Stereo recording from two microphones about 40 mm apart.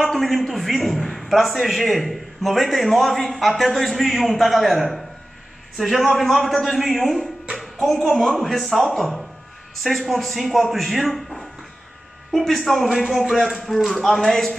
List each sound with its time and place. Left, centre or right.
0.0 s a man's voice: centre